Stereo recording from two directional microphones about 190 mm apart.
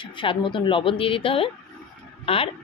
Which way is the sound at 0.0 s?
25° left (ahead or behind).